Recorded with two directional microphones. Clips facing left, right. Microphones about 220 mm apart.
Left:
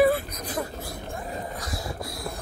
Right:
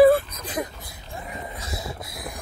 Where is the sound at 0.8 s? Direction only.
55° left (ahead or behind).